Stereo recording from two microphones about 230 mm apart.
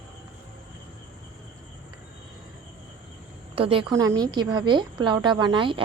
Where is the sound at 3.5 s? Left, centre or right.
Right.